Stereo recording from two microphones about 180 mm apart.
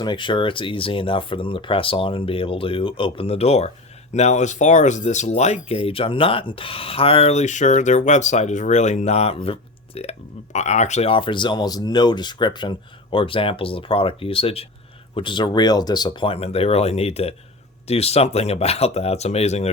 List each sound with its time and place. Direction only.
0.0 s speech: 25° left (ahead or behind)